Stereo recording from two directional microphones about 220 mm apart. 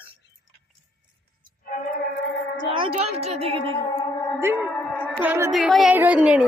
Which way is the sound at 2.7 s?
25° right (ahead or behind).